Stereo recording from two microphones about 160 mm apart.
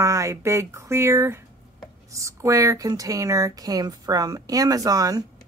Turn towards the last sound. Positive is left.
turn(degrees=-20)  # may be behind; listen again after turning